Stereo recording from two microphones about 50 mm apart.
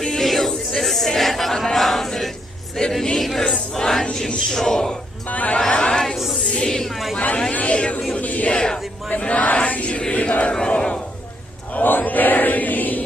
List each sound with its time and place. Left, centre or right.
0.0 s a sound: centre
2.9 s choir: centre
5.3 s speech: left
5.5 s chatter: centre
6.4 s music: centre
7.5 s speech: left
8.2 s a sound: left
8.5 s speech: centre
9.0 s a sound: left
10.5 s battle cry: centre
11.7 s chant: left